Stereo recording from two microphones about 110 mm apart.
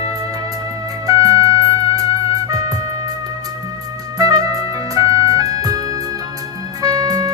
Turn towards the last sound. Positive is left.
turn(degrees=-35)  # may be behind; listen again after turning